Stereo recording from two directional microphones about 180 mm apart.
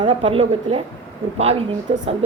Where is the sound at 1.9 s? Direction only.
30° right (ahead or behind).